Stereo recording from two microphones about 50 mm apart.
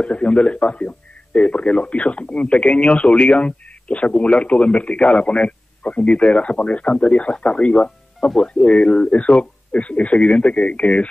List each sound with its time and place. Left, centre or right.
0.0 s speech: left